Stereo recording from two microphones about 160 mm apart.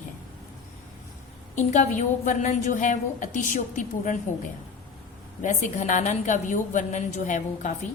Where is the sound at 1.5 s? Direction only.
50° left (ahead or behind).